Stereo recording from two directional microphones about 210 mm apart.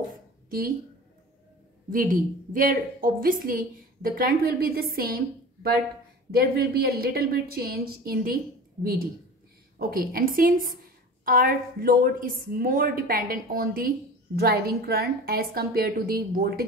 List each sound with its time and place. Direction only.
0.5 s speech: 45° right (ahead or behind)
1.9 s a woman's voice: 40° right (ahead or behind)